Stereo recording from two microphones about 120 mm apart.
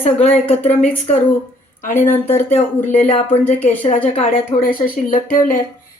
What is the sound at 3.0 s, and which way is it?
Speech, 60° left (ahead or behind).